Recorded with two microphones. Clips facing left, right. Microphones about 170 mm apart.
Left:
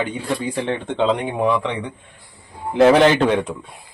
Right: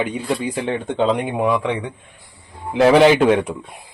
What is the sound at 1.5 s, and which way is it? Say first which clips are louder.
Speech: even; 10° right (ahead or behind).